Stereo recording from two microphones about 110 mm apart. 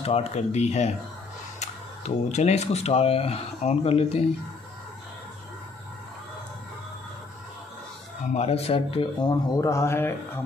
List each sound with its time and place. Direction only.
0.0 s speech: 70° left (ahead or behind)
8.3 s speech: 75° left (ahead or behind); by 9.1 s 55° left (ahead or behind)
9.2 s speech: 35° left (ahead or behind)